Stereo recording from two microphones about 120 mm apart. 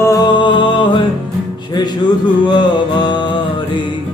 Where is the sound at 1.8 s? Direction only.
35° left (ahead or behind).